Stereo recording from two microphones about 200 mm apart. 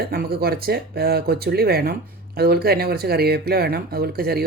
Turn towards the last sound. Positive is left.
turn(degrees=-50)  # may be behind; listen again after turning